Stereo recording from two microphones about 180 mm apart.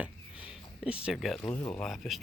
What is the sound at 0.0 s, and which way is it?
Speech, 5° right (ahead or behind).